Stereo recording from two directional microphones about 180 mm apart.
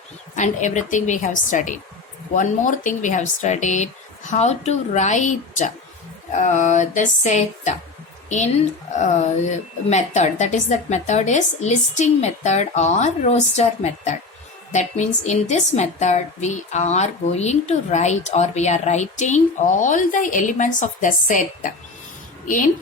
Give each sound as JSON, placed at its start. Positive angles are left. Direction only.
{"t": 0.3, "sound": "a woman's voice", "side_deg": 40}
{"t": 9.0, "sound": "a woman's voice", "side_deg": 40}